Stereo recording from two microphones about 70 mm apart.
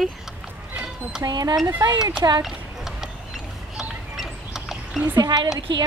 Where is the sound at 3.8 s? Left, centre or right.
Centre.